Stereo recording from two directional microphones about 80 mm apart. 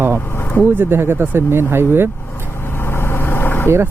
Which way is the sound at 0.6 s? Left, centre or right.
Right.